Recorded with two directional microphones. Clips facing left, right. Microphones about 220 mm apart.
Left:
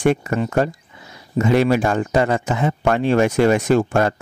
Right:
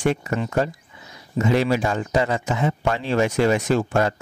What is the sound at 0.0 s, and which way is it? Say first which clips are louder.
Speech: left 4 dB; 55° left (ahead or behind).